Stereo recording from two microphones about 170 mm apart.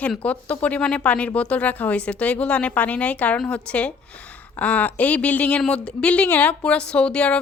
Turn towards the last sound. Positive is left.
turn(degrees=5)  # may be behind; listen again after turning